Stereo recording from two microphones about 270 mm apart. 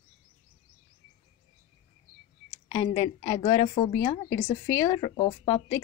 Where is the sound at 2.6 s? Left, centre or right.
Centre.